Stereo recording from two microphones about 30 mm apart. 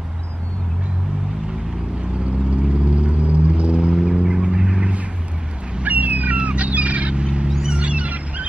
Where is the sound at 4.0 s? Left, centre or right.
Right.